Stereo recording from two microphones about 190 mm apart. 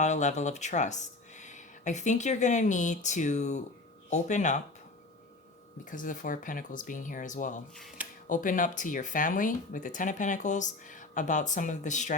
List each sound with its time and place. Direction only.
0.0 s speech: 40° left (ahead or behind)
5.8 s speech: 45° left (ahead or behind)
7.8 s speech: centre (ahead or behind)
8.3 s speech: 45° left (ahead or behind)